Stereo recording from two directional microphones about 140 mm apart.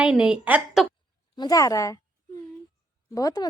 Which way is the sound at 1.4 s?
25° left (ahead or behind).